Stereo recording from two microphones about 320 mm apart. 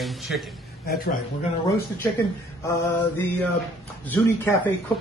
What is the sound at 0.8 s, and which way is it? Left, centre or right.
Speech, left.